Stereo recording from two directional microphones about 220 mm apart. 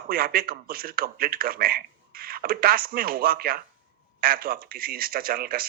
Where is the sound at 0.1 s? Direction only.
40° right (ahead or behind).